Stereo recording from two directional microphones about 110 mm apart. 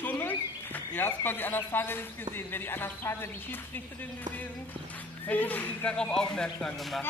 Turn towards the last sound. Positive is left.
turn(degrees=5)  # may be behind; listen again after turning